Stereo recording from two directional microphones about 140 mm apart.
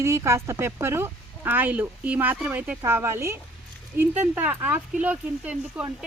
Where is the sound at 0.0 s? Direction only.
20° right (ahead or behind).